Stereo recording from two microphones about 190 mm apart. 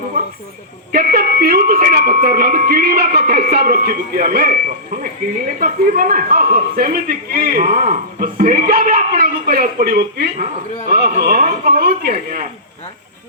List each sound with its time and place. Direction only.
0.9 s speech: 50° right (ahead or behind)